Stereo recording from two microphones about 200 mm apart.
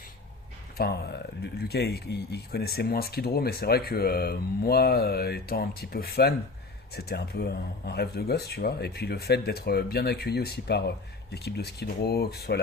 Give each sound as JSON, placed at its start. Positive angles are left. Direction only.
{"t": 0.8, "sound": "speech", "side_deg": 50}